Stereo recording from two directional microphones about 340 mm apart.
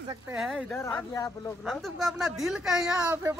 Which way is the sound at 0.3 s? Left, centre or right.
Centre.